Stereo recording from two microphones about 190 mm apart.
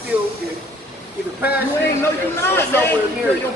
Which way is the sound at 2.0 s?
15° left (ahead or behind).